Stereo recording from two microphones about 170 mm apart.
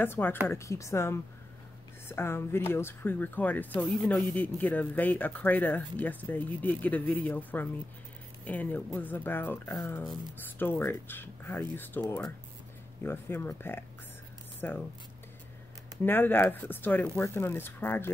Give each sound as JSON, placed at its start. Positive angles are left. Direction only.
{"t": 0.0, "sound": "speech", "side_deg": 10}
{"t": 16.0, "sound": "speech", "side_deg": 10}